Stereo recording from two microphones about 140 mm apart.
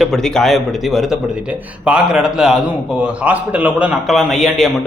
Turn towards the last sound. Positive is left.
turn(degrees=0)  # may be behind; listen again after turning